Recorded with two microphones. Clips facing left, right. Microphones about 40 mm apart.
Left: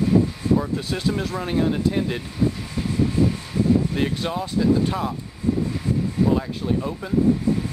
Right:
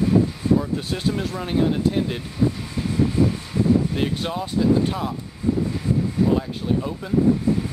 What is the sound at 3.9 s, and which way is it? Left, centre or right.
Speech, centre.